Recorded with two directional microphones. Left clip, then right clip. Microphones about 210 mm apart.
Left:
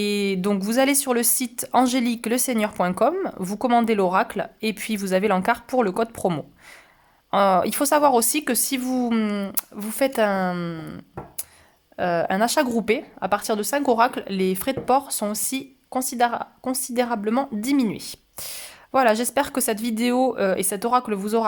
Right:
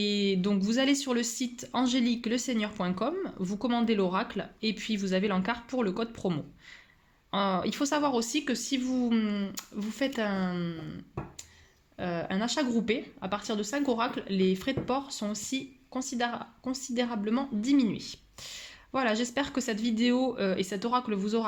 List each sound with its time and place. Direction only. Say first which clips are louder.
0.0 s speech: left 6 dB; 40° left (ahead or behind)